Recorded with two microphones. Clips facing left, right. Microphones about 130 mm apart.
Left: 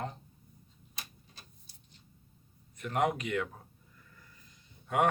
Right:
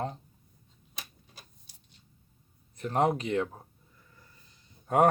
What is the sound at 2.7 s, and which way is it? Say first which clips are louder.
Speech: right 4 dB; 35° right (ahead or behind).